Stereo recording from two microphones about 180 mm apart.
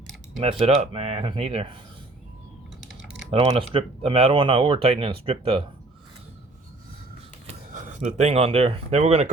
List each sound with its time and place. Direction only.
0.6 s speech: 35° right (ahead or behind)
3.2 s speech: 35° right (ahead or behind)
7.4 s speech: 45° right (ahead or behind)